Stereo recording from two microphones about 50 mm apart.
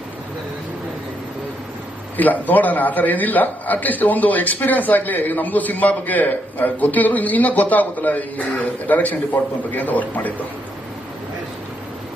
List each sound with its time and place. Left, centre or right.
2.1 s a man's voice: left